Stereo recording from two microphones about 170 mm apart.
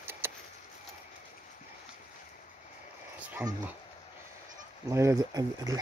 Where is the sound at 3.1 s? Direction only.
10° right (ahead or behind).